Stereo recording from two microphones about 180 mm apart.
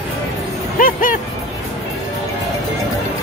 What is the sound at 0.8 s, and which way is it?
Music, 50° left (ahead or behind).